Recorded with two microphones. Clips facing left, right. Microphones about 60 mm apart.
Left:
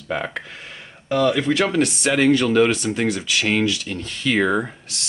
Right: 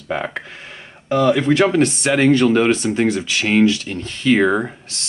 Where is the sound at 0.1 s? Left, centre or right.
Centre.